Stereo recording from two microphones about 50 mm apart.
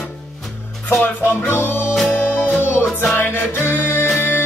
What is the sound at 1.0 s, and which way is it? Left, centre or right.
Music, left.